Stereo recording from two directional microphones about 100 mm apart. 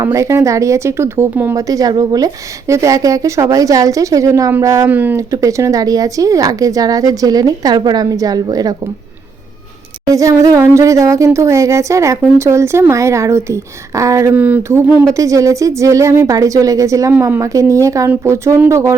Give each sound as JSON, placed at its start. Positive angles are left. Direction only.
{"t": 0.0, "sound": "speech", "side_deg": -30}
{"t": 1.5, "sound": "speech", "side_deg": -35}
{"t": 4.9, "sound": "a sound", "side_deg": -15}
{"t": 5.1, "sound": "speech", "side_deg": -30}
{"t": 10.1, "sound": "speech", "side_deg": -35}
{"t": 14.3, "sound": "a sound", "side_deg": -15}
{"t": 15.0, "sound": "speech", "side_deg": -35}